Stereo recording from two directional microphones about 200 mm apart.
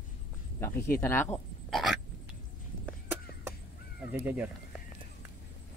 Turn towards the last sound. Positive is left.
turn(degrees=-10)  # may be behind; listen again after turning